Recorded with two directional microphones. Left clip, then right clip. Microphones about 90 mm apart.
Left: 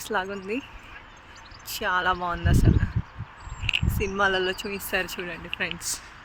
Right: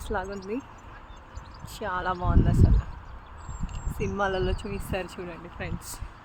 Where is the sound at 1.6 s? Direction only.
25° left (ahead or behind).